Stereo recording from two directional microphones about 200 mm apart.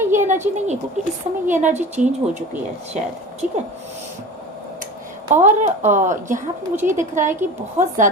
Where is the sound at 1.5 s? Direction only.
35° right (ahead or behind).